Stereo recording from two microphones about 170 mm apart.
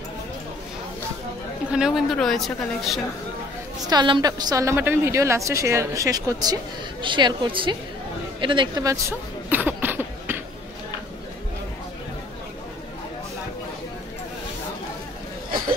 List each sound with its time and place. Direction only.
1.7 s a woman's voice: 5° right (ahead or behind)
3.9 s a woman's voice: 25° right (ahead or behind)
8.4 s a sound: 30° right (ahead or behind); by 10.4 s 10° right (ahead or behind)